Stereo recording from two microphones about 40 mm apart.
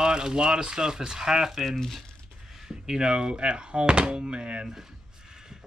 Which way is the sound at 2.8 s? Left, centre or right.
Centre.